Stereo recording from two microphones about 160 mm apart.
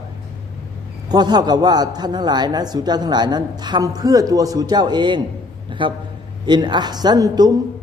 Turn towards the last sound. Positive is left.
turn(degrees=-25)  # may be behind; listen again after turning